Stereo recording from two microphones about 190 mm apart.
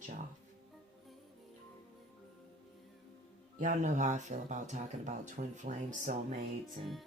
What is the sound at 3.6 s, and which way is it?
Speech, 45° right (ahead or behind).